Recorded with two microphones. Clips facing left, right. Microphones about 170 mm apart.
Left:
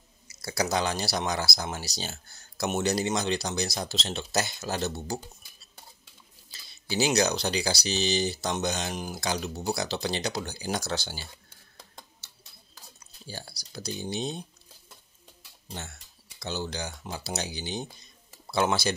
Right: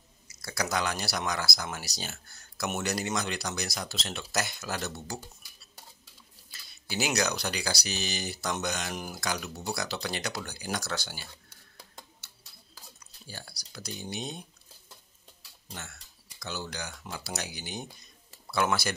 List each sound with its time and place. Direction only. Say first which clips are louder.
0.4 s speech: left 3 dB; 25° left (ahead or behind)
6.5 s speech: left 5 dB; 30° left (ahead or behind)
13.3 s speech: left 4 dB; 30° left (ahead or behind)
15.7 s speech: left 4 dB; 25° left (ahead or behind)